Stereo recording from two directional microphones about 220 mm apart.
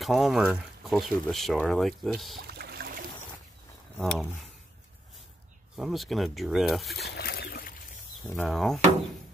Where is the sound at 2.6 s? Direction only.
45° right (ahead or behind).